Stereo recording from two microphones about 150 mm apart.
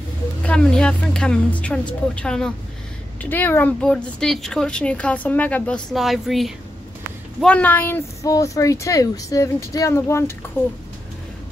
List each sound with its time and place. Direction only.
0.5 s speech: 5° left (ahead or behind)
5.9 s speech: centre (ahead or behind)
7.4 s speech: 10° left (ahead or behind)